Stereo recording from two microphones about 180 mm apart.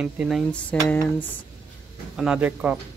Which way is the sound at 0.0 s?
5° right (ahead or behind).